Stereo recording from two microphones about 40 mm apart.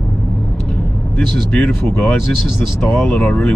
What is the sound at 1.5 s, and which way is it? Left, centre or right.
Speech, centre.